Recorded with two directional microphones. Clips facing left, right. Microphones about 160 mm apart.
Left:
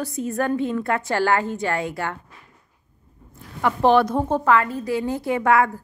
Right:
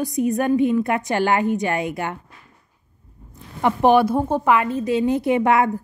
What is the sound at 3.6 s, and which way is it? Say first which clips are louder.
A woman's voice: right 2 dB; 15° right (ahead or behind).